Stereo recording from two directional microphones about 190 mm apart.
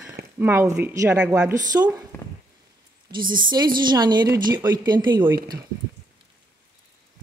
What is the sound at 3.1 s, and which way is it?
Speech, 55° right (ahead or behind).